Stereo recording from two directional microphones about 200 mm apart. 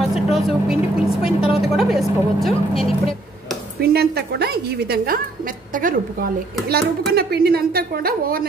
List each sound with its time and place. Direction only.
0.0 s vehicle: centre (ahead or behind)
1.6 s speech: centre (ahead or behind)
3.8 s a woman's voice: 50° right (ahead or behind)